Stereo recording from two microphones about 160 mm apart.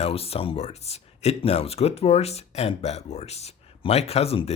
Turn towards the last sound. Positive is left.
turn(degrees=40)  # may be behind; listen again after turning